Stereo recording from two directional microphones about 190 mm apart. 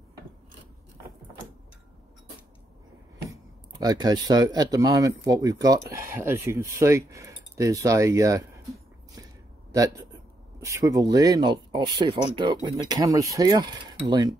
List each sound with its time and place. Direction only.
3.8 s speech: 20° right (ahead or behind)
10.6 s speech: 15° right (ahead or behind)